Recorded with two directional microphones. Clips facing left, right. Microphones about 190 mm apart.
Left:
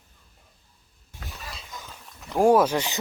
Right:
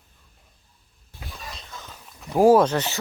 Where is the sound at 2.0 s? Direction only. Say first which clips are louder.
Right 3 dB; centre (ahead or behind).